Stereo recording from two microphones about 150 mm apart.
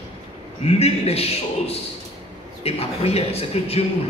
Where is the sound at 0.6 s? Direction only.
40° left (ahead or behind).